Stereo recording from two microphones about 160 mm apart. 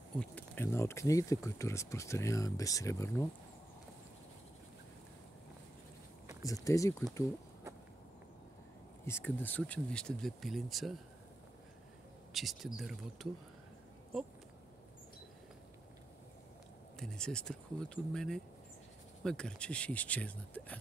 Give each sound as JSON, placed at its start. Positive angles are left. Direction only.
{"t": 0.2, "sound": "speech", "side_deg": 10}
{"t": 6.4, "sound": "speech", "side_deg": 20}
{"t": 9.0, "sound": "speech", "side_deg": 15}
{"t": 12.3, "sound": "speech", "side_deg": 0}
{"t": 17.0, "sound": "speech", "side_deg": 5}